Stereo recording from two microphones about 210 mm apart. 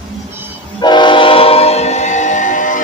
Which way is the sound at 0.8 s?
20° left (ahead or behind).